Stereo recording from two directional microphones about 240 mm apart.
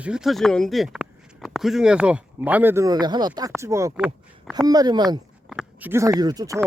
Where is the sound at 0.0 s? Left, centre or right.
Centre.